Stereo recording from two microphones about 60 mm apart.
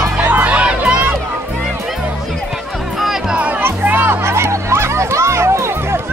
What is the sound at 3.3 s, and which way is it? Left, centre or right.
Music, right.